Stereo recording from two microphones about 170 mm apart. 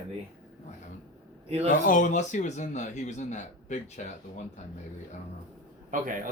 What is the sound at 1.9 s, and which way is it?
A man's voice, 45° left (ahead or behind).